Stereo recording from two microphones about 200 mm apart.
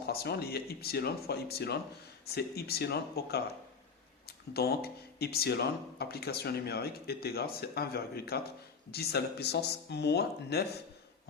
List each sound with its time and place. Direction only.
0.0 s speech: 50° left (ahead or behind)